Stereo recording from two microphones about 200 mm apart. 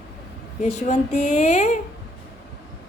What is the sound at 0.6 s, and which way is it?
A woman's voice, 35° left (ahead or behind).